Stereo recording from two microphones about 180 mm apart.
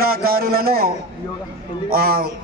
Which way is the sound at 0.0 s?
55° right (ahead or behind).